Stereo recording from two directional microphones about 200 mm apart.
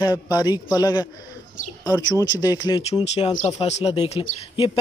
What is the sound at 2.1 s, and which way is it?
Speech, 20° left (ahead or behind).